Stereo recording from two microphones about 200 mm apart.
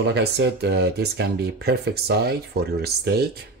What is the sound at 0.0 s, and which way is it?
Speech, 55° right (ahead or behind).